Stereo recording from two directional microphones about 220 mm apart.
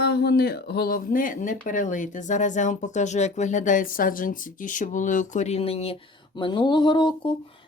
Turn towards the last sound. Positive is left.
turn(degrees=20)  # may be behind; listen again after turning